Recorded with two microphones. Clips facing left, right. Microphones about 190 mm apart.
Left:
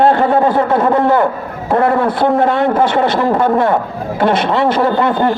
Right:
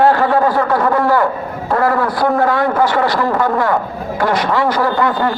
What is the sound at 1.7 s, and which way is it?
A man's voice, 25° left (ahead or behind).